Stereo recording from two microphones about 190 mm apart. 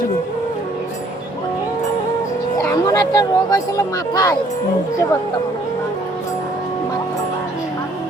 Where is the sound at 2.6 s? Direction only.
15° left (ahead or behind).